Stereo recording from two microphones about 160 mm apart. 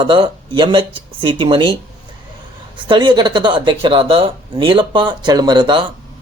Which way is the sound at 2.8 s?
30° right (ahead or behind).